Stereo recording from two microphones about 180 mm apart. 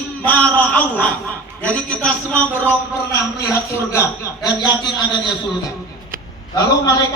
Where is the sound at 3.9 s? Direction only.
15° left (ahead or behind).